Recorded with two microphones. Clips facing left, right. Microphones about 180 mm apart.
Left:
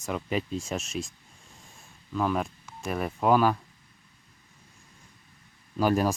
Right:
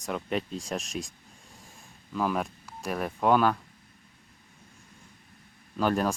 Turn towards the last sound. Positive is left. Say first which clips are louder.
# left 2 dB
turn(degrees=10)  # may be behind; listen again after turning